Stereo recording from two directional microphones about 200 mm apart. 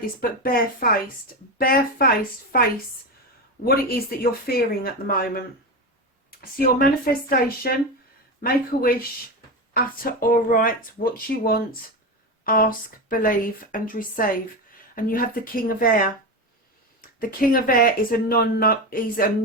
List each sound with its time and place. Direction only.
0.0 s speech: 45° left (ahead or behind)
6.4 s speech: 45° left (ahead or behind)